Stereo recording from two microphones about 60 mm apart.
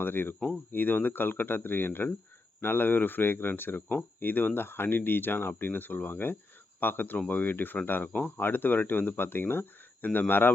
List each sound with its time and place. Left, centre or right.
0.0 s speech: left